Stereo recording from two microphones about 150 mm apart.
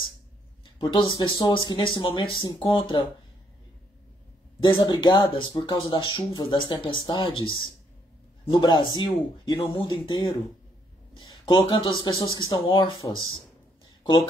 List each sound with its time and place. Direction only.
0.7 s speech: 30° left (ahead or behind)
4.6 s speech: 30° left (ahead or behind)